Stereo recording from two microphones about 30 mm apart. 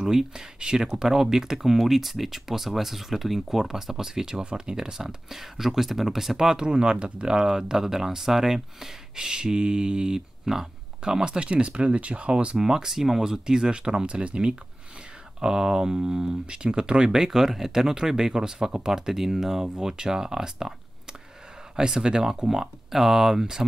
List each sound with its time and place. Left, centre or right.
0.0 s speech: centre
4.4 s speech: right
5.4 s speech: centre
6.6 s speech: right
7.3 s speech: right
9.1 s speech: right
11.0 s speech: right
11.3 s speech: right
12.5 s speech: centre
22.5 s speech: centre